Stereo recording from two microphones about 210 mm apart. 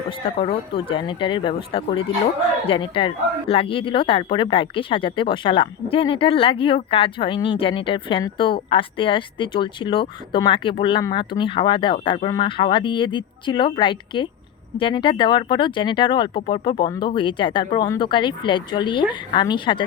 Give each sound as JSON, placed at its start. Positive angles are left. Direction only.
{"t": 0.3, "sound": "speech", "side_deg": 25}